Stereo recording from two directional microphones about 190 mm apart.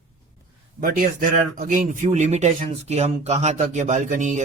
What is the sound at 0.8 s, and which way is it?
Speech, 45° right (ahead or behind).